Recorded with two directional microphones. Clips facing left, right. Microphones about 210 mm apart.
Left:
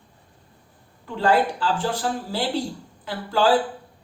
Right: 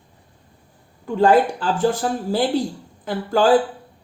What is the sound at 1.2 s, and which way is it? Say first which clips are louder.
Speech: right 5 dB; 45° right (ahead or behind).